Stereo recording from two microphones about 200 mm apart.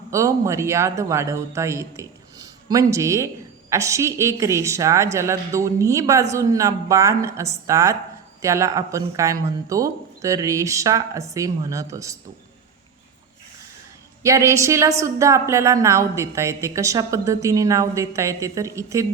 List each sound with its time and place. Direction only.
0.1 s a woman's voice: 15° right (ahead or behind)
14.2 s a woman's voice: 15° right (ahead or behind)